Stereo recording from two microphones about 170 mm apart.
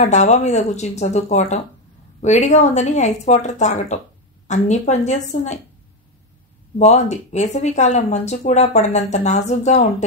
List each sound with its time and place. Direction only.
0.0 s speech: 40° left (ahead or behind)
6.8 s speech: 40° left (ahead or behind)